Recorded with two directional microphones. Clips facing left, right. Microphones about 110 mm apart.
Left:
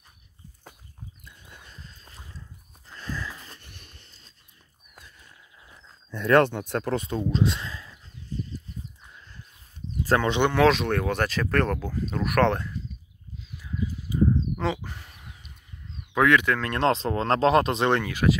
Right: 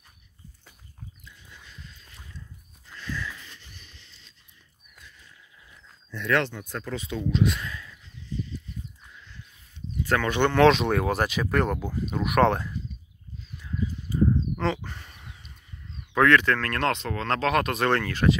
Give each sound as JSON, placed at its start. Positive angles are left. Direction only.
{"t": 1.2, "sound": "pig", "side_deg": 50}
{"t": 2.9, "sound": "wheeze", "side_deg": 40}
{"t": 3.6, "sound": "a sound", "side_deg": 55}
{"t": 6.5, "sound": "speech", "side_deg": 65}
{"t": 7.2, "sound": "a sound", "side_deg": 35}
{"t": 10.5, "sound": "speech", "side_deg": 0}
{"t": 13.5, "sound": "horse", "side_deg": 5}
{"t": 14.6, "sound": "a sound", "side_deg": 10}
{"t": 16.1, "sound": "speech", "side_deg": 10}
{"t": 16.7, "sound": "speech", "side_deg": 30}